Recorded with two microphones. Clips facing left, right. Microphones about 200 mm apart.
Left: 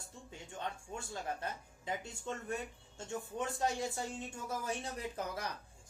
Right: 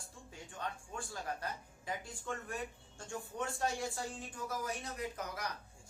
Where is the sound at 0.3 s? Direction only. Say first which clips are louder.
Left 1 dB; 25° left (ahead or behind).